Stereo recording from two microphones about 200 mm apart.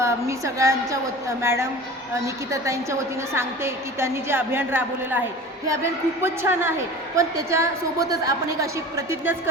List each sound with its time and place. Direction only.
0.0 s a woman's voice: 15° right (ahead or behind)